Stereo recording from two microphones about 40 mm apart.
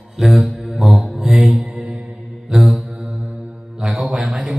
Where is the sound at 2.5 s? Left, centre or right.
Centre.